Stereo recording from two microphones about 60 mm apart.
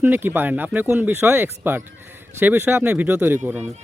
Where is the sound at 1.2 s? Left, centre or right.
Right.